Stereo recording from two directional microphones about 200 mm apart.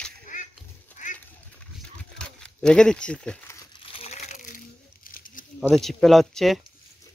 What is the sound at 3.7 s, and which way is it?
Crumpling, 30° left (ahead or behind).